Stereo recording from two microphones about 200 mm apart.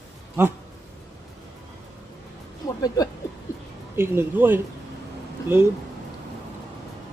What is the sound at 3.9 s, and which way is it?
Speech, 10° right (ahead or behind).